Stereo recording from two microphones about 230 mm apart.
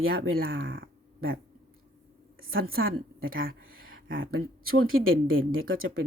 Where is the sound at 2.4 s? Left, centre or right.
Right.